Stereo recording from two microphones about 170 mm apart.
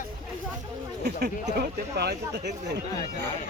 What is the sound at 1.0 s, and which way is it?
Speech, 70° right (ahead or behind).